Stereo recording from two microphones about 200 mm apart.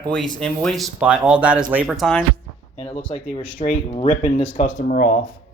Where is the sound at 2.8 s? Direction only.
25° left (ahead or behind).